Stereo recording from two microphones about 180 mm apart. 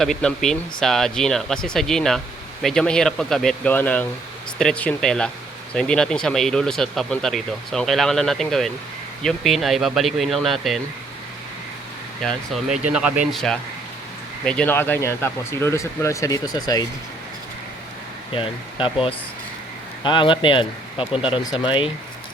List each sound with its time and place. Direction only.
0.0 s speech: centre (ahead or behind)
12.2 s speech: centre (ahead or behind); by 16.8 s 20° left (ahead or behind)
18.3 s speech: 30° left (ahead or behind)